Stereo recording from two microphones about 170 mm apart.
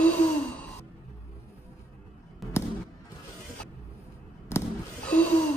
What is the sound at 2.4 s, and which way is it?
Fireworks, centre (ahead or behind).